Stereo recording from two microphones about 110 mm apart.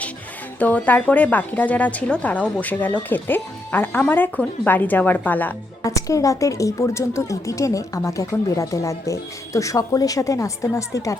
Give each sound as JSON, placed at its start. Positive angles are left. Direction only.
{"t": 0.6, "sound": "speech", "side_deg": 15}
{"t": 5.8, "sound": "a woman's voice", "side_deg": 30}